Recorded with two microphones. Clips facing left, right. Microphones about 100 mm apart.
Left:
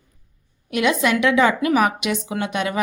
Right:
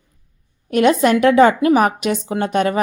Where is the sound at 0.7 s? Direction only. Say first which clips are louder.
Right 6 dB; 40° right (ahead or behind).